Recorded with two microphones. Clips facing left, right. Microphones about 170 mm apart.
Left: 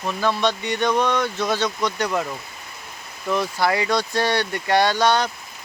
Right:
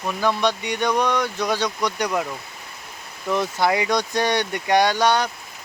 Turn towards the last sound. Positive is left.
turn(degrees=-10)  # may be behind; listen again after turning